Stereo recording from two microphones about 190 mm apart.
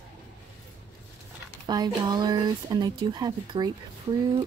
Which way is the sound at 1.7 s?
20° right (ahead or behind).